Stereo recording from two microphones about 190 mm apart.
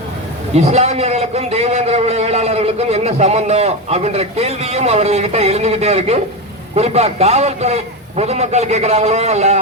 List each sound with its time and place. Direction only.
0.5 s a man's voice: 35° right (ahead or behind)